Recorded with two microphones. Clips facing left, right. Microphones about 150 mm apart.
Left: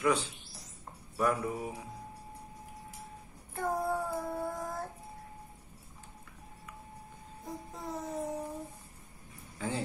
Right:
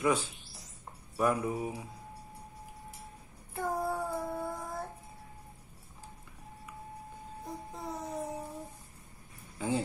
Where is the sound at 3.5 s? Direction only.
Centre (ahead or behind).